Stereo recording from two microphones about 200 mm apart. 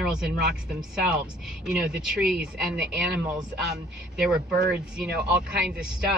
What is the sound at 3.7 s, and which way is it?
Speech, 5° right (ahead or behind).